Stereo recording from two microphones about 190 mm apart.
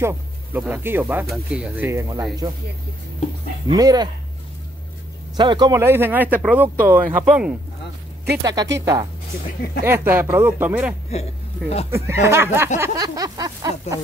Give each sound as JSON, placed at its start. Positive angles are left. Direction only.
{"t": 0.0, "sound": "speech", "side_deg": -10}
{"t": 3.6, "sound": "speech", "side_deg": -20}
{"t": 5.3, "sound": "speech", "side_deg": -25}
{"t": 8.4, "sound": "speech", "side_deg": -20}